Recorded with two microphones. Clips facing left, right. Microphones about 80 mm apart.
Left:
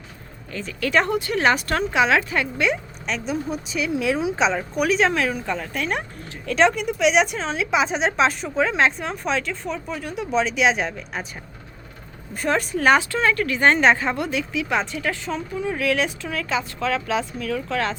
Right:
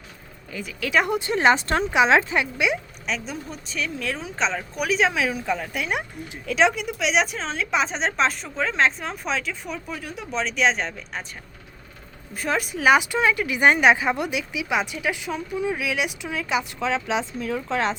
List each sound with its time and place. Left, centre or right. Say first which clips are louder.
0.5 s speech: left 2 dB; centre
1.0 s speech: right 1 dB; right
2.6 s speech: left 1 dB; centre
12.3 s speech: left 3 dB; centre; by 17.9 s right